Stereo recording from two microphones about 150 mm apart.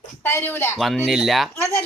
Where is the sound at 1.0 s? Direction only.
Centre (ahead or behind).